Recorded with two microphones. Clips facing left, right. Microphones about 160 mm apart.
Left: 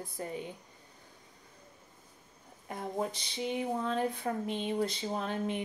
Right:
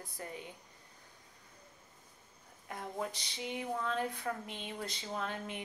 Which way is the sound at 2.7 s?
30° left (ahead or behind).